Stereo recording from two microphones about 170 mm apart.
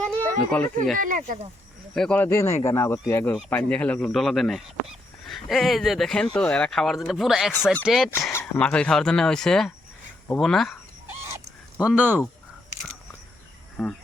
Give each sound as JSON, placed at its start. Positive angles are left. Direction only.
{"t": 0.0, "sound": "a sound", "side_deg": 5}
{"t": 0.9, "sound": "speech", "side_deg": -55}
{"t": 1.9, "sound": "speech", "side_deg": 5}
{"t": 8.3, "sound": "speech", "side_deg": 10}
{"t": 11.1, "sound": "chicken", "side_deg": -15}
{"t": 11.8, "sound": "speech", "side_deg": -5}